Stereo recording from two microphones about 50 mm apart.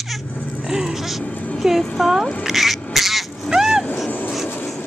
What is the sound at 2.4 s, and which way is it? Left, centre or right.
Duck, centre.